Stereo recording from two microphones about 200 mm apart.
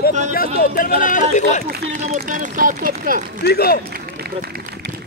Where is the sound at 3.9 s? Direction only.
50° right (ahead or behind).